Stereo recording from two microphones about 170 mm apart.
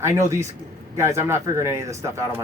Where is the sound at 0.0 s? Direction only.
15° right (ahead or behind).